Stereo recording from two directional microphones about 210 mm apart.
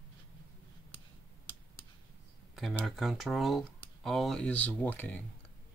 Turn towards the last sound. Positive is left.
turn(degrees=10)  # may be behind; listen again after turning